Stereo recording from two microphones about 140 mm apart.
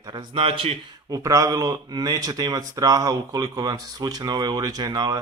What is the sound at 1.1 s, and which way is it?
Speech, 25° right (ahead or behind).